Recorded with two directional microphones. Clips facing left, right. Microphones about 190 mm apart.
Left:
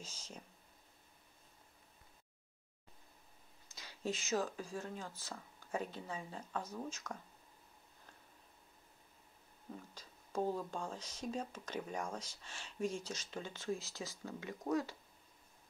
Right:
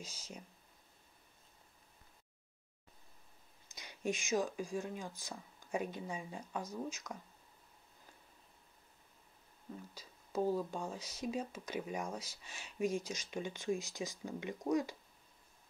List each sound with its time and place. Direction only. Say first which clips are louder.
0.0 s speech: right 2 dB; 10° right (ahead or behind)
3.6 s speech: right 3 dB; 15° right (ahead or behind)
9.9 s speech: right 2 dB; 10° right (ahead or behind)